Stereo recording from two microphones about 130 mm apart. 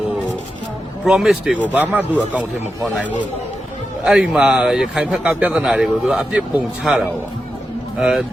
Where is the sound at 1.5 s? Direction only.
10° right (ahead or behind).